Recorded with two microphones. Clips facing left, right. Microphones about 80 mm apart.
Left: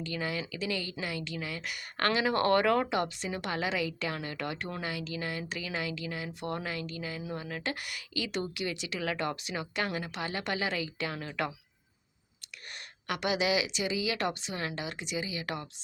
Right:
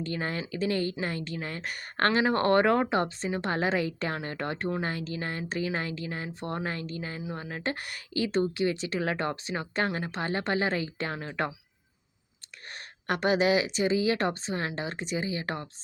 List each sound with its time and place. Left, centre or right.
0.0 s a woman's voice: right
12.7 s a woman's voice: right